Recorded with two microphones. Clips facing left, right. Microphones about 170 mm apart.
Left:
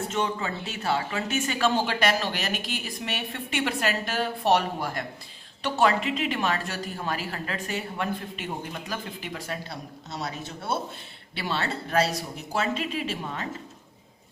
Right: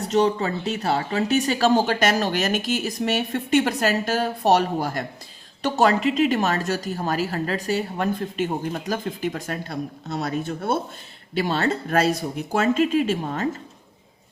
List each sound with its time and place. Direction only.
0.0 s a woman's voice: 40° right (ahead or behind)